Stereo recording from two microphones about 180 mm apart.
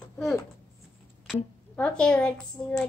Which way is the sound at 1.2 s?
5° left (ahead or behind).